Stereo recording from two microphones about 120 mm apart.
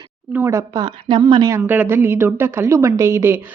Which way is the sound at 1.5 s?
20° right (ahead or behind).